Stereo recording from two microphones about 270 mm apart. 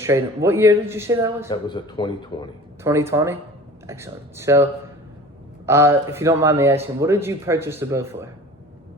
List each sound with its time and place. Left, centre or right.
0.0 s speech: centre
1.5 s speech: centre
2.8 s speech: centre